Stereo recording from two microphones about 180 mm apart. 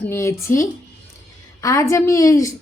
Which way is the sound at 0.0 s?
15° left (ahead or behind).